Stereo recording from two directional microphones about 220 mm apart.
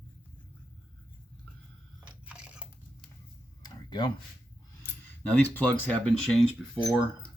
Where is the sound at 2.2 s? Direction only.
5° right (ahead or behind).